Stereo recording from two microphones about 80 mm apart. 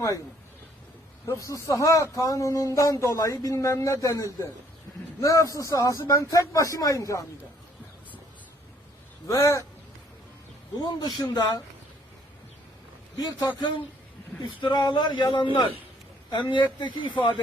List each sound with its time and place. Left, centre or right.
1.3 s speech: left
9.2 s speech: left
10.8 s speech: left
13.1 s speech: left
13.6 s a man's voice: left
14.6 s speech: left
16.3 s speech: left
17.2 s a man's voice: left